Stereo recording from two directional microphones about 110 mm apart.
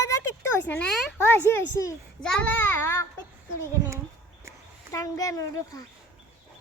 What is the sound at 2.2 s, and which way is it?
Speech, 10° left (ahead or behind).